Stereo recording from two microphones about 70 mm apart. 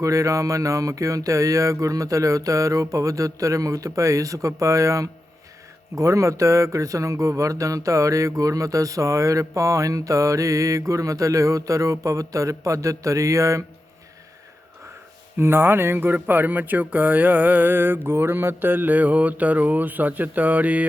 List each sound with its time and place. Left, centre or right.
0.0 s speech: right
15.4 s speech: right